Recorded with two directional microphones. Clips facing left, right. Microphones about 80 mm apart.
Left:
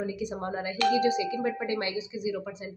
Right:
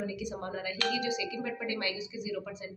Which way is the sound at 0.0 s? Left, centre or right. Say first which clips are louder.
Left 4 dB; left.